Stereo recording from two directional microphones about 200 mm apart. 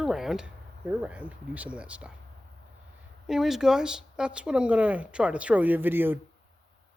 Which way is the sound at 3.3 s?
Centre (ahead or behind).